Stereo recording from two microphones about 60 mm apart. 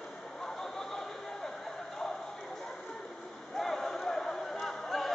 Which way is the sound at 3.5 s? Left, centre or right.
Centre.